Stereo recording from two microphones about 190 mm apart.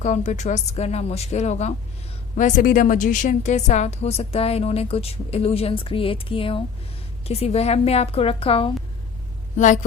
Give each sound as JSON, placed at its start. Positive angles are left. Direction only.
{"t": 0.0, "sound": "a woman's voice", "side_deg": 40}
{"t": 9.6, "sound": "a woman's voice", "side_deg": 40}